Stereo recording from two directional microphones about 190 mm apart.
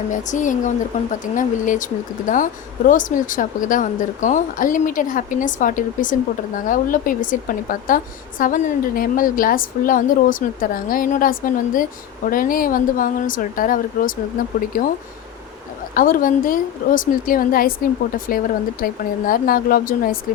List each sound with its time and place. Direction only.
0.1 s a woman's voice: 40° left (ahead or behind)
16.0 s a woman's voice: 45° left (ahead or behind)